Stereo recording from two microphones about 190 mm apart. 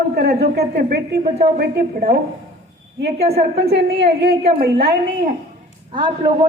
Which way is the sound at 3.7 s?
60° right (ahead or behind).